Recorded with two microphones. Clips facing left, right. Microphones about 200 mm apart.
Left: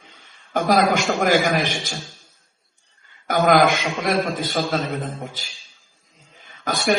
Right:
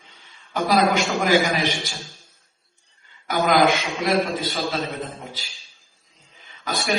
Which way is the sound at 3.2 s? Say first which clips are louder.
Left 2 dB; 50° left (ahead or behind).